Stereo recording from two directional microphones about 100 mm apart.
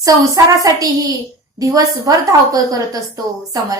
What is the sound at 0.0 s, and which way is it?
A woman's voice, 35° right (ahead or behind).